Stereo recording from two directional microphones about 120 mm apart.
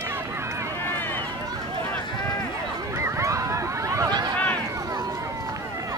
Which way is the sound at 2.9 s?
25° right (ahead or behind).